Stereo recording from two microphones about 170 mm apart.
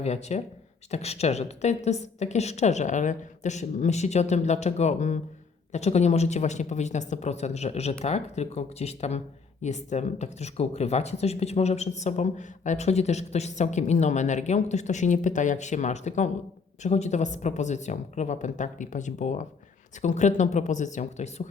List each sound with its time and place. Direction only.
0.0 s a woman's voice: 40° left (ahead or behind)